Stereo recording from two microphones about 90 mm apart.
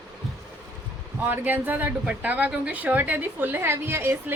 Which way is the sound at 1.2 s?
20° right (ahead or behind).